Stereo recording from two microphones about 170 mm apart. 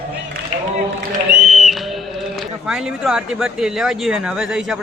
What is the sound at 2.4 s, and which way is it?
Speech, centre (ahead or behind).